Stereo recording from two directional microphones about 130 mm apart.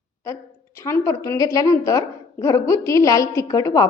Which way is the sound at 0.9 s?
20° left (ahead or behind).